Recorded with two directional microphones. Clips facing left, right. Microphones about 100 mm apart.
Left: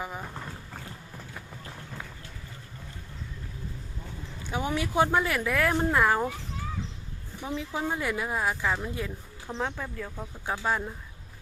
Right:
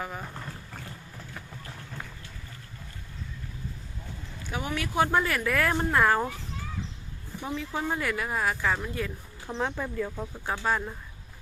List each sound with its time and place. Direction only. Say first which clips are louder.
0.0 s boat: even; 10° left (ahead or behind)
4.5 s speech: left 2 dB; 25° left (ahead or behind)
5.1 s speech: even; 10° left (ahead or behind)
7.5 s speech: even; 10° left (ahead or behind)
9.5 s speech: right 2 dB; centre (ahead or behind)